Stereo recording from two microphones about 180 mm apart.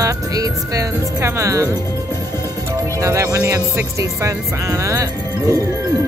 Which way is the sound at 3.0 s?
15° right (ahead or behind).